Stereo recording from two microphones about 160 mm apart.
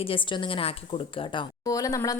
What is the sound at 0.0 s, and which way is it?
A woman's voice, 35° left (ahead or behind).